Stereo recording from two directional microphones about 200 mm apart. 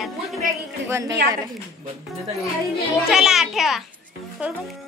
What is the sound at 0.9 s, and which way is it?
Speech, 15° right (ahead or behind).